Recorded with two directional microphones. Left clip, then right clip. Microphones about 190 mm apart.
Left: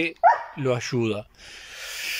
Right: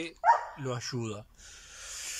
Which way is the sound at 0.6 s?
15° left (ahead or behind).